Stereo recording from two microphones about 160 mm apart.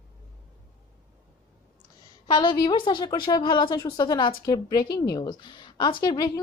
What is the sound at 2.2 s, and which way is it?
A woman's voice, 25° left (ahead or behind).